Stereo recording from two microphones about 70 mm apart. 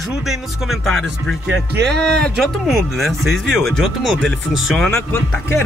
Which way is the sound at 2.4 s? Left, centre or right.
Centre.